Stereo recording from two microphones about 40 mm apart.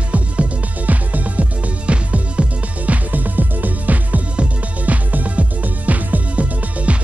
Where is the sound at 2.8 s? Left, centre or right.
Right.